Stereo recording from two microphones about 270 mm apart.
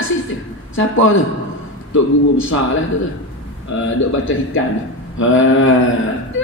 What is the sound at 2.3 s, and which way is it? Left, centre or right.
Speech, left.